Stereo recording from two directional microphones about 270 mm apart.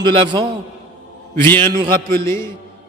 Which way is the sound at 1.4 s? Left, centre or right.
Centre.